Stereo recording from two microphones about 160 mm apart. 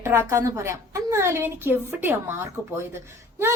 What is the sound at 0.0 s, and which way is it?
Speech, 15° right (ahead or behind).